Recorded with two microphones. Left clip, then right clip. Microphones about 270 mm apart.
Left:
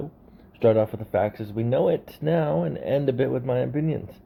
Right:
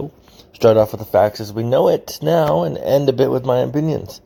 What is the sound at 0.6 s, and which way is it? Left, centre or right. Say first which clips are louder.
Speech: right 8 dB; right.